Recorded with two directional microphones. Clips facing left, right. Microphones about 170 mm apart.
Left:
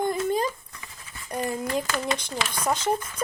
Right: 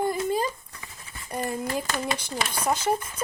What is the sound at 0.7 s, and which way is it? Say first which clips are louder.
Dog: even; 30° right (ahead or behind).